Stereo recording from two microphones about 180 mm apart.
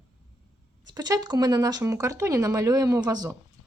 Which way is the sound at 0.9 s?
20° right (ahead or behind).